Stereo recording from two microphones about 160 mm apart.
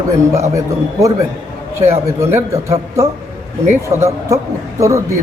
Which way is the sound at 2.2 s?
15° right (ahead or behind).